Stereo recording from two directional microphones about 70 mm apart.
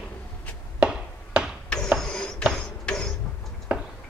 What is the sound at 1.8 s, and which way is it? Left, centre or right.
Printer, centre.